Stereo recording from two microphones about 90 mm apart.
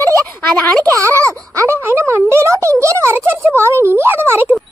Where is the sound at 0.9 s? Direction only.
35° right (ahead or behind).